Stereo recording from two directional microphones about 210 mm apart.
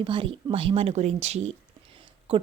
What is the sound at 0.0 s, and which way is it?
A woman's voice, 25° right (ahead or behind).